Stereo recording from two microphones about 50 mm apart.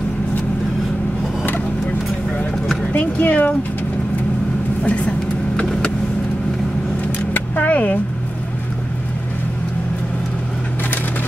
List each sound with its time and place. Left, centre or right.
3.0 s speech: left
4.8 s speech: left
7.2 s vehicle: left